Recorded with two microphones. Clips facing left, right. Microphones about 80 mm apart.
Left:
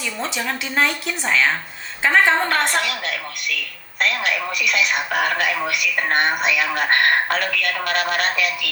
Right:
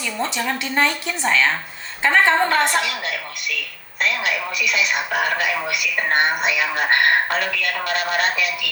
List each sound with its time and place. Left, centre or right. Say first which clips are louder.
0.2 s a woman's voice: right 3 dB; centre
2.6 s speech: right 1 dB; left